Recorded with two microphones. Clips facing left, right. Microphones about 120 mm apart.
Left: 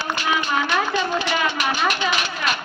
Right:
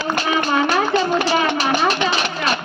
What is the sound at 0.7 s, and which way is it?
Speech, 35° right (ahead or behind).